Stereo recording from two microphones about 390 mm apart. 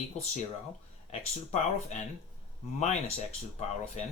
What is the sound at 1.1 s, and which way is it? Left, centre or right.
Speech, centre.